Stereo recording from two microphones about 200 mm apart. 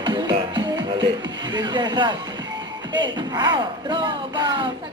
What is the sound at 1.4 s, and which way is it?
Speech, 20° right (ahead or behind).